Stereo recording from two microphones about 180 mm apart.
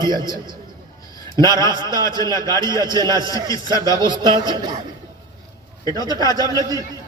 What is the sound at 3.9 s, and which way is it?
Speech, 25° right (ahead or behind).